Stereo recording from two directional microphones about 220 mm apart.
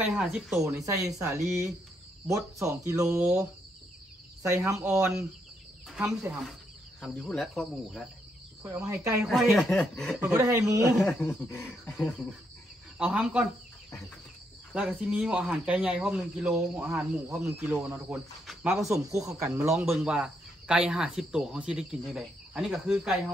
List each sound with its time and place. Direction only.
0.0 s speech: 5° right (ahead or behind)
0.7 s speech: 15° right (ahead or behind)
4.6 s speech: 15° right (ahead or behind)
8.6 s speech: 15° right (ahead or behind)
9.2 s speech: centre (ahead or behind)
11.0 s speech: 5° left (ahead or behind)
12.9 s speech: 5° right (ahead or behind)
14.7 s speech: 5° right (ahead or behind)
18.8 s speech: 15° right (ahead or behind)